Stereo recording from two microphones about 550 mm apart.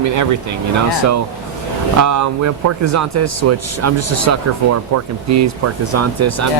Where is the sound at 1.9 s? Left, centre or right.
Right.